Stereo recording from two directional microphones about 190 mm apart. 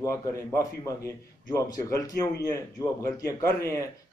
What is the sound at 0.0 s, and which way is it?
A man's voice, 15° left (ahead or behind).